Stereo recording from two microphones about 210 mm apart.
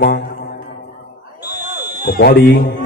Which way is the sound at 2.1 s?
45° left (ahead or behind).